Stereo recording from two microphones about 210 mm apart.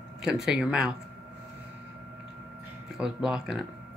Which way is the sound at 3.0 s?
5° right (ahead or behind).